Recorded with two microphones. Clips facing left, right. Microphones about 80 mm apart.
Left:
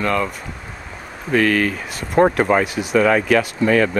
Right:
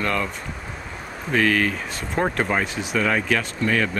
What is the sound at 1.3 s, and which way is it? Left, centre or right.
Speech, centre.